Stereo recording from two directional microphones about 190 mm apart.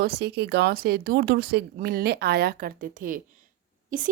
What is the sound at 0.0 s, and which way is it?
Speech, 60° right (ahead or behind).